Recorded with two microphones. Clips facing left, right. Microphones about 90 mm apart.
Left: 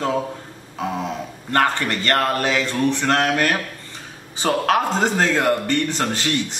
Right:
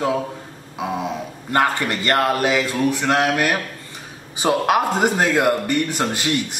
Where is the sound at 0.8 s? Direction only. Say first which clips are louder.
Right 1 dB; 10° right (ahead or behind).